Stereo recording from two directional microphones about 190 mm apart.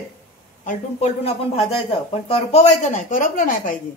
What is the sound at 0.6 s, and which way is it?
A woman's voice, 35° left (ahead or behind).